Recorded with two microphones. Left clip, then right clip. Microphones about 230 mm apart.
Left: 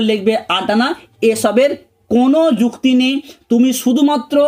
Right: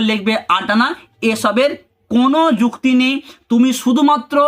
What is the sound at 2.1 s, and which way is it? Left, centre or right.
Speech, right.